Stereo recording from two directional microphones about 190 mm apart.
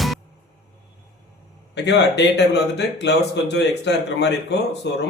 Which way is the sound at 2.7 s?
65° left (ahead or behind).